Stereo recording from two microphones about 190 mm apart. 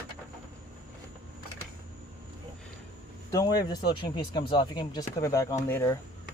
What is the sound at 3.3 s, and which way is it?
Speech, 20° left (ahead or behind).